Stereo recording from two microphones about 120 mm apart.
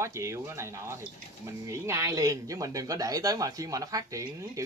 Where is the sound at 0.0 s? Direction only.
25° right (ahead or behind).